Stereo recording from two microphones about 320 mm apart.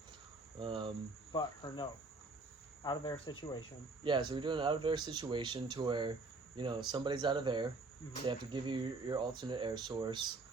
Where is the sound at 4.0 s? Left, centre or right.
Centre.